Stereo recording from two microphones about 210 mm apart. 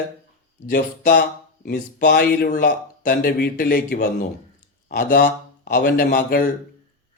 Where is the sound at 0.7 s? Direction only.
40° left (ahead or behind).